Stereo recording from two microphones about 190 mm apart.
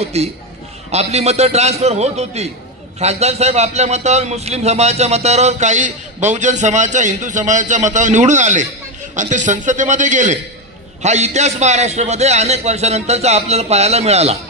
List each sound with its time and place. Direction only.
0.0 s a man's voice: 35° right (ahead or behind)